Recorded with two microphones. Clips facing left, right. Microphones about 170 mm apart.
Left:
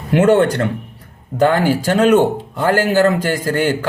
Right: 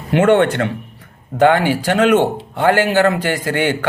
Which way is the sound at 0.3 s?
35° left (ahead or behind).